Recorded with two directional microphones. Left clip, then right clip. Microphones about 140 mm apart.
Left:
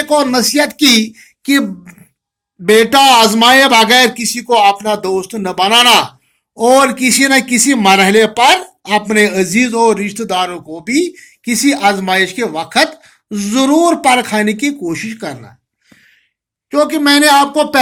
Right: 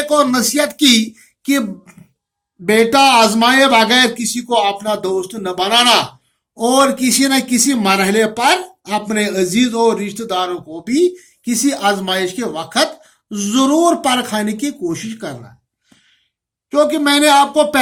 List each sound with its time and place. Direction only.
0.1 s a man's voice: 25° left (ahead or behind)
16.6 s a man's voice: 30° left (ahead or behind)